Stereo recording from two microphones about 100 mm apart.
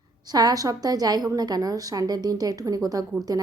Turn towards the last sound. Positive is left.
turn(degrees=-35)  # may be behind; listen again after turning